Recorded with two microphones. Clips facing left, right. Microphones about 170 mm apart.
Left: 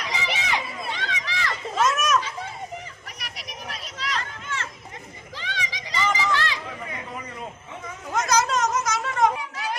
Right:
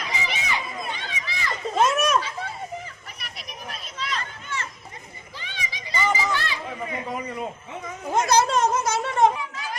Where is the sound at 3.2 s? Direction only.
85° left.